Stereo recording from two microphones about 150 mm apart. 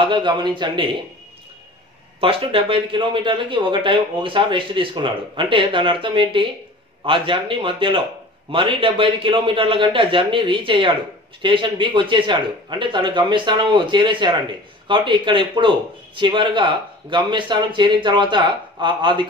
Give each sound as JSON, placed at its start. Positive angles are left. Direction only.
{"t": 0.0, "sound": "speech", "side_deg": -30}
{"t": 2.1, "sound": "speech", "side_deg": -35}